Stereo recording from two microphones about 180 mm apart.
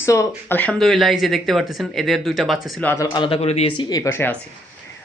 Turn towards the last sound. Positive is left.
turn(degrees=15)  # may be behind; listen again after turning